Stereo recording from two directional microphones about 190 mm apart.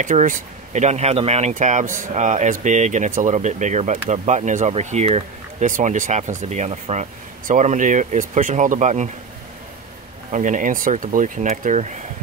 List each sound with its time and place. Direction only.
0.0 s speech: 45° right (ahead or behind)
10.3 s speech: 45° right (ahead or behind)